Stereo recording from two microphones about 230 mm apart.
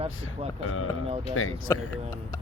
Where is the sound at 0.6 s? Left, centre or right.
Left.